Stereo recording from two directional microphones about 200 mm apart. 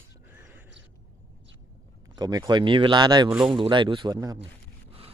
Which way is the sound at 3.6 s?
25° right (ahead or behind).